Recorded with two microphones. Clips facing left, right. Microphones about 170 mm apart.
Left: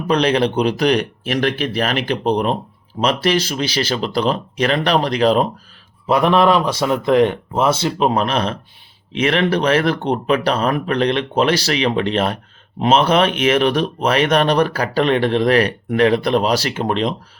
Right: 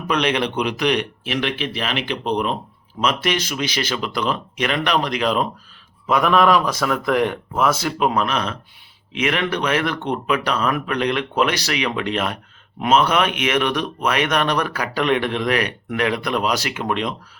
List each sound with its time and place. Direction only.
0.1 s speech: 35° left (ahead or behind)